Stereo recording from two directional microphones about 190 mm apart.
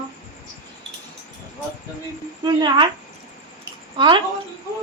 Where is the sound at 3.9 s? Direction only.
25° right (ahead or behind).